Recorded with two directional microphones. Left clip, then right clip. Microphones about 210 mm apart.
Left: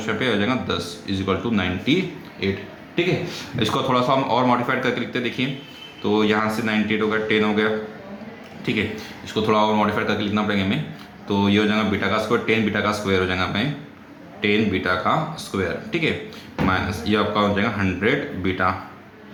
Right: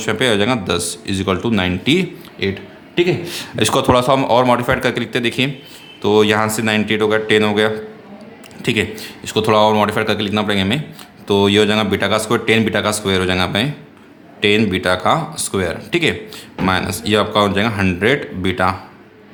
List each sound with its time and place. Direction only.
0.0 s a man's voice: 55° right (ahead or behind)
9.2 s a man's voice: 55° right (ahead or behind)